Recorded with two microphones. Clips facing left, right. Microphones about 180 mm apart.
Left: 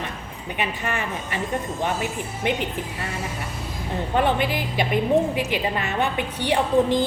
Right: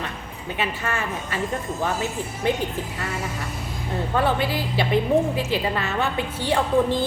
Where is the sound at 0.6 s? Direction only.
15° left (ahead or behind).